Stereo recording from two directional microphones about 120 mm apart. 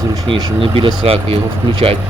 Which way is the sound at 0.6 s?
45° right (ahead or behind).